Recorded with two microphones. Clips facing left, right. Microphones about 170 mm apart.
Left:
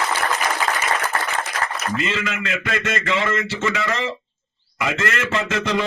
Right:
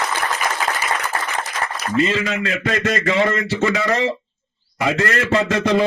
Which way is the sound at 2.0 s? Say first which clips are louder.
Right 10 dB; 35° right (ahead or behind).